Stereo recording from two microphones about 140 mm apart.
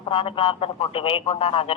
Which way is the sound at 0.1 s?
40° left (ahead or behind).